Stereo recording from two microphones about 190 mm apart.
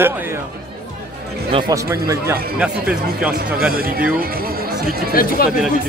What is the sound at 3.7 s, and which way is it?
Speech, 50° right (ahead or behind).